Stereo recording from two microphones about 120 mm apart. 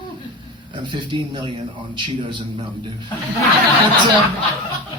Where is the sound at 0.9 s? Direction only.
40° right (ahead or behind).